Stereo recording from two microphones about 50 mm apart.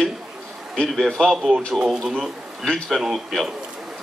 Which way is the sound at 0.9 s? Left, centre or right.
Centre.